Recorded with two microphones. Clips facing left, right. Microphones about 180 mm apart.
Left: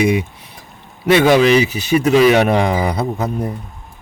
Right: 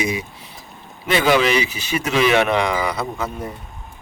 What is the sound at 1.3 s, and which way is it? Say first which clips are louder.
Speech: left 6 dB; 45° left (ahead or behind).